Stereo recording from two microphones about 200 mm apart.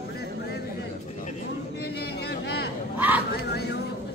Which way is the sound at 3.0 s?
10° right (ahead or behind).